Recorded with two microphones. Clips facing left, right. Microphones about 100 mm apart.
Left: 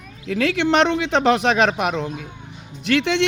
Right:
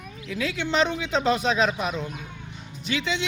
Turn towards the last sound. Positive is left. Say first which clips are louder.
# left 8 dB
turn(degrees=70)  # may be behind; listen again after turning